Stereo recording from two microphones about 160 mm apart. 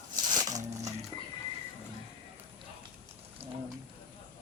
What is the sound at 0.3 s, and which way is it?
Music, 25° right (ahead or behind).